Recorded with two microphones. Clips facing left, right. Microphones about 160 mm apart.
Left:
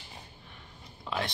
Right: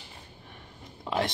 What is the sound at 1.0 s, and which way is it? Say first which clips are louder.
Speech: right 5 dB; 20° right (ahead or behind).